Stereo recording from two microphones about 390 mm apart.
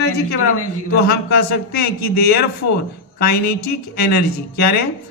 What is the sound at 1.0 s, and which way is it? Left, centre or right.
A man's voice, left.